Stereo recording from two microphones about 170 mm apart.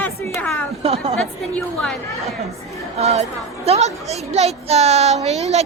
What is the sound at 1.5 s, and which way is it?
Speech, 5° left (ahead or behind).